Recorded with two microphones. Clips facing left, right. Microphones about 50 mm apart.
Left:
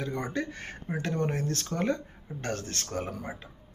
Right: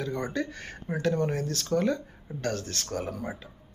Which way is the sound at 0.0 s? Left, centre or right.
Left.